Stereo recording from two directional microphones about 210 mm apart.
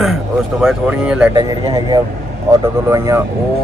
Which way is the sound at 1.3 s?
20° right (ahead or behind).